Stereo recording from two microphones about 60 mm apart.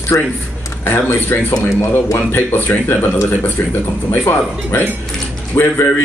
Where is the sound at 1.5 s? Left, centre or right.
Left.